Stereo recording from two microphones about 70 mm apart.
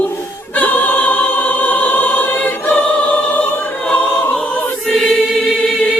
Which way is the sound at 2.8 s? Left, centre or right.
Centre.